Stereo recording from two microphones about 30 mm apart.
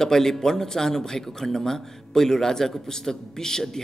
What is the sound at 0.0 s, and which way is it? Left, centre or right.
Speech, centre.